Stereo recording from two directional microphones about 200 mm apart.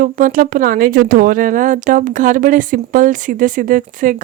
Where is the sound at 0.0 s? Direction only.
40° right (ahead or behind).